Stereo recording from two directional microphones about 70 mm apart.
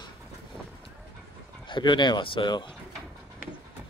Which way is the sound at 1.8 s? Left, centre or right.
Left.